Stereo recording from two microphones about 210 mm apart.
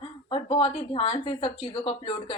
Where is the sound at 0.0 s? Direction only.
25° left (ahead or behind).